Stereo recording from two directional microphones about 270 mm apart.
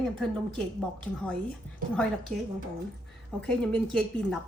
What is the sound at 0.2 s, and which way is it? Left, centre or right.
A woman's voice, centre.